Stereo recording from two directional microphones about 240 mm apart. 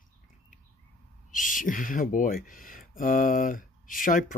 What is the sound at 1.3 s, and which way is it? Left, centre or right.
Speech, left.